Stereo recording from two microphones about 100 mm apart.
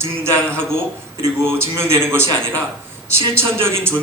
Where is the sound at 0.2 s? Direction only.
25° right (ahead or behind).